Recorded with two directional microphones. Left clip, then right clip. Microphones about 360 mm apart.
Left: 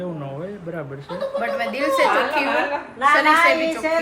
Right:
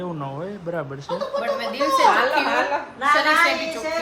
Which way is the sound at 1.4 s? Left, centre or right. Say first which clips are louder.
Left 1 dB; centre.